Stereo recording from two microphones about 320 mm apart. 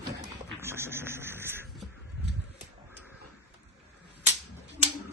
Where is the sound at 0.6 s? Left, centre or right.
Centre.